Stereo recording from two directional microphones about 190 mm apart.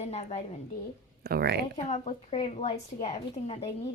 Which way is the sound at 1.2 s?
55° right (ahead or behind).